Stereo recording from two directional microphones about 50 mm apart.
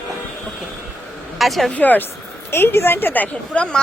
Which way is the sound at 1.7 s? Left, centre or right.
Left.